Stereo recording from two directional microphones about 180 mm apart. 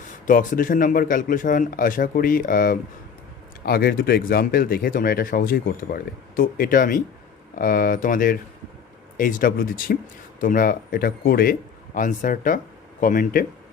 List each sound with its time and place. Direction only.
0.3 s speech: 50° left (ahead or behind)